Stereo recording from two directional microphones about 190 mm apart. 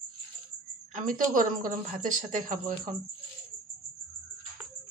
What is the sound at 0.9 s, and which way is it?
A woman's voice, 45° right (ahead or behind).